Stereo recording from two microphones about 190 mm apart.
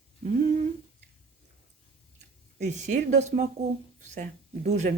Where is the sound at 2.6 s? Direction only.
35° right (ahead or behind).